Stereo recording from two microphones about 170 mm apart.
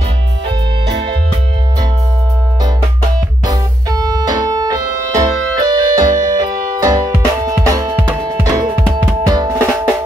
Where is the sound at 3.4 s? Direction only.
20° right (ahead or behind).